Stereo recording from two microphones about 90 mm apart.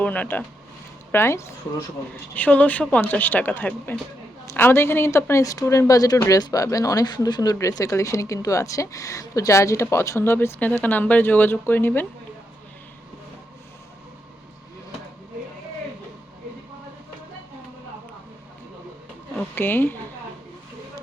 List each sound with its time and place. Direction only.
0.0 s speech: 15° left (ahead or behind)
1.1 s a woman's voice: 30° left (ahead or behind)
2.3 s a woman's voice: 15° left (ahead or behind); by 7.5 s 50° left (ahead or behind)
7.7 s a woman's voice: 40° left (ahead or behind); by 12.0 s 20° left (ahead or behind)
19.4 s a woman's voice: 20° left (ahead or behind)